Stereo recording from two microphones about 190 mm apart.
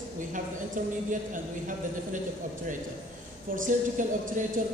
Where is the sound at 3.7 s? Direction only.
45° right (ahead or behind).